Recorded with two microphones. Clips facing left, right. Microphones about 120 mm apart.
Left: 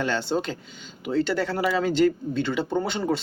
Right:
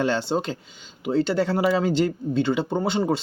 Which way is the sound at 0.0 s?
30° right (ahead or behind).